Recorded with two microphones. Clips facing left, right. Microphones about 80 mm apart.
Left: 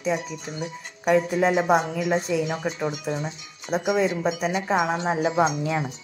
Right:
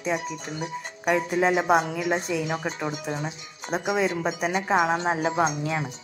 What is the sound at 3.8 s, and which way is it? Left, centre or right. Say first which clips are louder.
Speech: left 2 dB; right.